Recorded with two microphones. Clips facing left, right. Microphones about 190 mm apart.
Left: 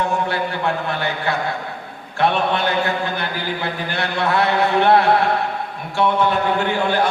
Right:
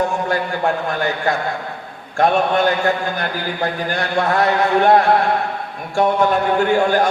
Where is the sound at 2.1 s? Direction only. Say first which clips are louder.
Right 3 dB; 45° right (ahead or behind).